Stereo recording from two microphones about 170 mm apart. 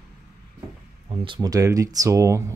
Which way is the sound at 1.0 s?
30° right (ahead or behind).